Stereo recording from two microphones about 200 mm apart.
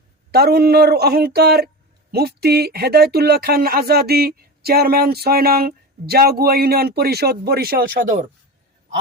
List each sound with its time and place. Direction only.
0.3 s speech: 50° right (ahead or behind)